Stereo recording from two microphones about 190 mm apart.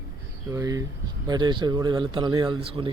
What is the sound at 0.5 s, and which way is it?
Speech, 20° right (ahead or behind).